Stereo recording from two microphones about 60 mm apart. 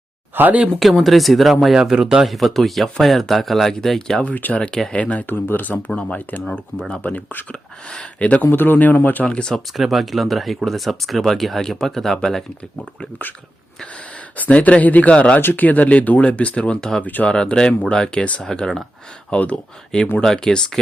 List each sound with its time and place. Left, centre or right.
0.3 s speech: right
0.8 s speech: centre
1.7 s speech: centre
4.2 s speech: left
5.2 s speech: left
5.9 s speech: centre
8.4 s speech: left
9.2 s speech: centre
9.7 s speech: centre
14.3 s speech: left
15.4 s speech: left; by 17.0 s centre
17.0 s speech: left
17.2 s speech: centre
19.3 s speech: left